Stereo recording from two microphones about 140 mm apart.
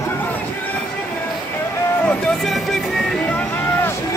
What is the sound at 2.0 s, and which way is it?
Music, 5° left (ahead or behind).